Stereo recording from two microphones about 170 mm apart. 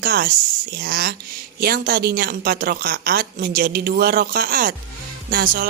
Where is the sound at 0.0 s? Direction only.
60° right (ahead or behind).